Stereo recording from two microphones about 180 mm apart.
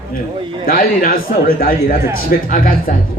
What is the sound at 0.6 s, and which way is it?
Speech, 55° left (ahead or behind).